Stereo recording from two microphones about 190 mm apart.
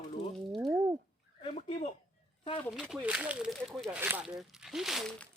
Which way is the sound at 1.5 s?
40° left (ahead or behind).